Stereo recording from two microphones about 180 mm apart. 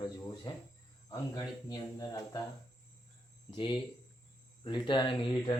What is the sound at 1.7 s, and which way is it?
Speech, 20° left (ahead or behind).